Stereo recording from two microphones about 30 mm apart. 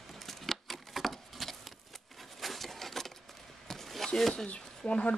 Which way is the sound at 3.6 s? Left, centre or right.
Centre.